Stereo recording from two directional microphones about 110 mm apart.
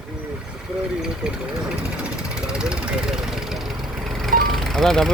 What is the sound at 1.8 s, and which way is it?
Vehicle, 10° right (ahead or behind).